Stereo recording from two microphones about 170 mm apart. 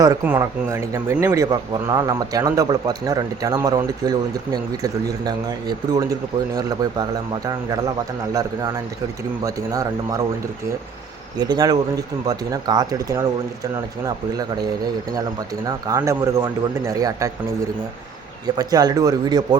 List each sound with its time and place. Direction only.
0.0 s speech: 15° right (ahead or behind)
8.3 s speech: 20° right (ahead or behind)
11.3 s speech: 25° right (ahead or behind)
15.9 s speech: 20° right (ahead or behind)
18.5 s speech: 25° right (ahead or behind)